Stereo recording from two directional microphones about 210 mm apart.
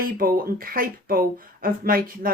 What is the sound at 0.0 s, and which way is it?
Speech, 45° right (ahead or behind).